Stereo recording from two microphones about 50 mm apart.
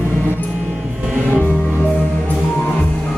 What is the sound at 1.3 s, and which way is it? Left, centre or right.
Music, left.